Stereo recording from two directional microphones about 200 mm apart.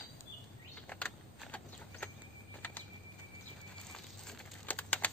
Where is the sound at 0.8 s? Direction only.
5° left (ahead or behind).